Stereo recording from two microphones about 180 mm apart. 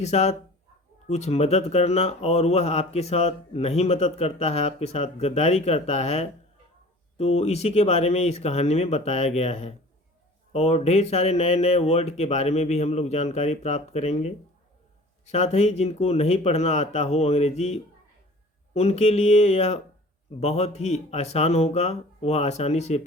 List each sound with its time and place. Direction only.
0.0 s speech: 40° left (ahead or behind)